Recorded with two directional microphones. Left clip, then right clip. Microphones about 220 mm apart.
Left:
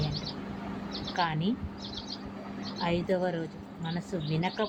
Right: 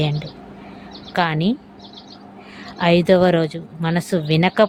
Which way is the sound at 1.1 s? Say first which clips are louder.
Right 11 dB; 45° right (ahead or behind).